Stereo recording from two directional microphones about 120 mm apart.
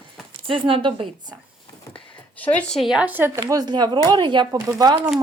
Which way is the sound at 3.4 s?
35° right (ahead or behind).